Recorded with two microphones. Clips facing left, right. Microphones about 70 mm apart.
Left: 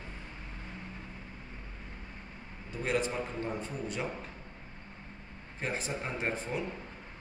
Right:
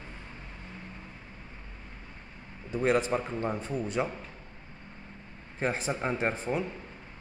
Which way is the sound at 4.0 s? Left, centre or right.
Right.